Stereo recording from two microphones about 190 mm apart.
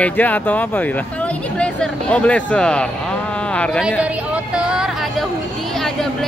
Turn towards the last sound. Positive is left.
turn(degrees=-5)  # may be behind; listen again after turning